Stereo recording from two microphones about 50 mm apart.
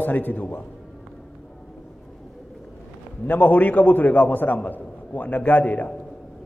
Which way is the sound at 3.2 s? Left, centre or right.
Left.